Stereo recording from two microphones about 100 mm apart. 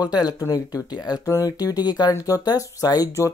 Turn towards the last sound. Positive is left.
turn(degrees=40)  # may be behind; listen again after turning